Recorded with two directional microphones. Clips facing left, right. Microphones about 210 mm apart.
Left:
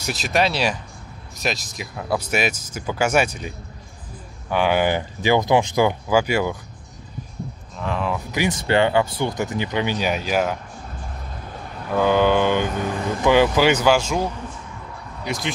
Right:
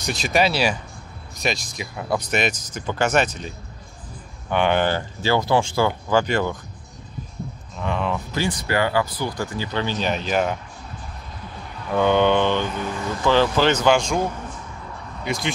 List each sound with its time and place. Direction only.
0.0 s speech: 5° left (ahead or behind)
7.7 s speech: centre (ahead or behind)
8.3 s speech: 20° left (ahead or behind)
11.9 s speech: 5° left (ahead or behind)